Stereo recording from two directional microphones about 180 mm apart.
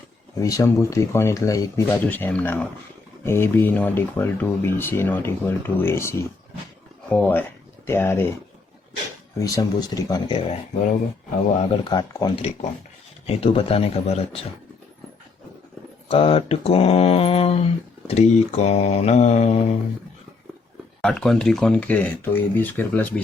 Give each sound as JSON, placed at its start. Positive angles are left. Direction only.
{"t": 0.3, "sound": "speech", "side_deg": 20}
{"t": 9.4, "sound": "speech", "side_deg": 20}
{"t": 11.7, "sound": "speech", "side_deg": 25}
{"t": 16.0, "sound": "speech", "side_deg": 30}
{"t": 21.0, "sound": "speech", "side_deg": 5}